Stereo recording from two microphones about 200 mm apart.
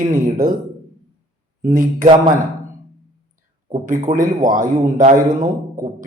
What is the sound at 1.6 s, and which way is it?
Mantra, 40° right (ahead or behind).